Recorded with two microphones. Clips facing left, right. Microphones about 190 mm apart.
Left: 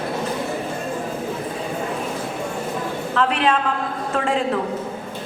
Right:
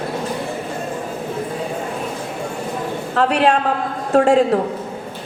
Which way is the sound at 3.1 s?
40° right (ahead or behind).